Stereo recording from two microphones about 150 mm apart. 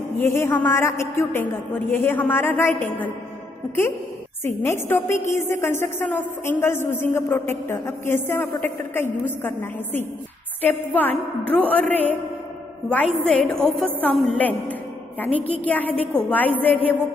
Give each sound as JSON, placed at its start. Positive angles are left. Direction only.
{"t": 0.2, "sound": "a woman's voice", "side_deg": 15}
{"t": 4.5, "sound": "a woman's voice", "side_deg": 15}